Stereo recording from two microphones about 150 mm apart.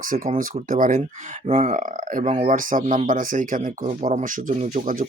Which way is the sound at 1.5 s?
45° right (ahead or behind).